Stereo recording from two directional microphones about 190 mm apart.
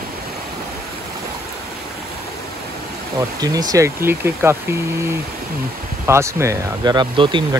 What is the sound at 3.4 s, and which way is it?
Speech, 20° right (ahead or behind).